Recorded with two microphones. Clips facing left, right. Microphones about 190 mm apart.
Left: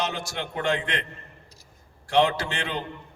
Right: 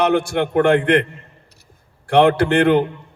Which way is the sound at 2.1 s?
60° right (ahead or behind).